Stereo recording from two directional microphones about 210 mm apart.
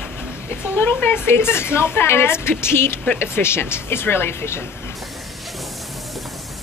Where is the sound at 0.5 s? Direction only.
10° left (ahead or behind).